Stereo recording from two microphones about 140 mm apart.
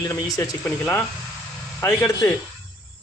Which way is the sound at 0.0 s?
25° left (ahead or behind).